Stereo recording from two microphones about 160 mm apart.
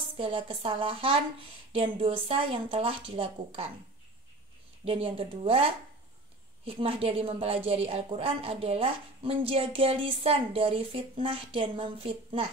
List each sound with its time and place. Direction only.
0.2 s a woman's voice: 35° right (ahead or behind)
4.8 s a woman's voice: 35° right (ahead or behind)